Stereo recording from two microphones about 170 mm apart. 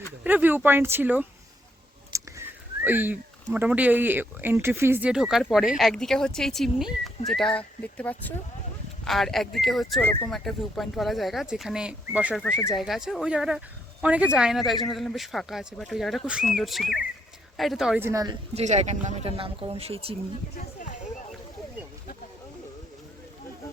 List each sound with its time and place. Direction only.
0.3 s speech: 10° right (ahead or behind)
10.0 s speech: 10° left (ahead or behind)
10.3 s speech: centre (ahead or behind)
18.0 s a woman's voice: 20° right (ahead or behind)
18.5 s speech: 40° right (ahead or behind)